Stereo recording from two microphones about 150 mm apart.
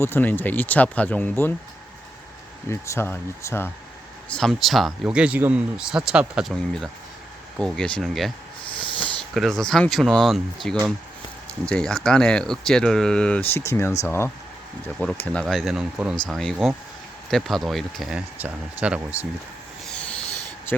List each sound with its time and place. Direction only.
0.0 s speech: 15° left (ahead or behind)
2.6 s speech: 20° left (ahead or behind)
4.3 s speech: 5° left (ahead or behind)
8.6 s a sound: 35° left (ahead or behind)
9.1 s speech: centre (ahead or behind)
19.9 s rub: 5° left (ahead or behind)